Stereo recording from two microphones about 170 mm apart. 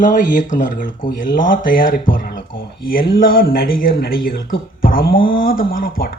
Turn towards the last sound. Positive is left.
turn(degrees=60)  # may be behind; listen again after turning